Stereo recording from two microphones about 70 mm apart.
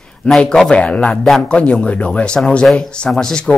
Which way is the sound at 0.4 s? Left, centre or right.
Centre.